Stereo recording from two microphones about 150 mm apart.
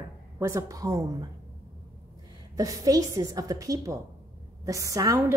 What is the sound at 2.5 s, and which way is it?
A woman's voice, 25° right (ahead or behind).